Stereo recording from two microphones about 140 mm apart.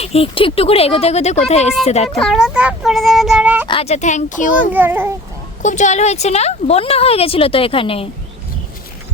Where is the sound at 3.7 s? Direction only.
45° left (ahead or behind); by 4.7 s 65° left (ahead or behind).